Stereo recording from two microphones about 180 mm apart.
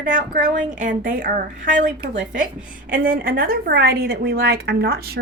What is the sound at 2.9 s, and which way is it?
Speech, 50° right (ahead or behind).